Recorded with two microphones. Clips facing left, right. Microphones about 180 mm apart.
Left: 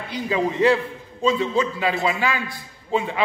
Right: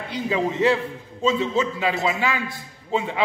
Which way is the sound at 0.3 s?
25° right (ahead or behind).